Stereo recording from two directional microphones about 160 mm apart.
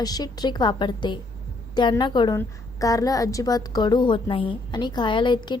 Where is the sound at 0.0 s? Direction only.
25° left (ahead or behind).